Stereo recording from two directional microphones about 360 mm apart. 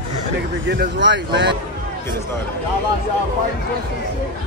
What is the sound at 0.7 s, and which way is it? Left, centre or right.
Speech, right.